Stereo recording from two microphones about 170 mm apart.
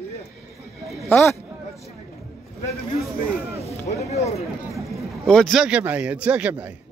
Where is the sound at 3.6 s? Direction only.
35° left (ahead or behind).